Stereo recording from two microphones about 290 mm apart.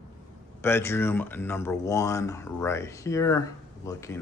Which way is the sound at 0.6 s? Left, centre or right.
Centre.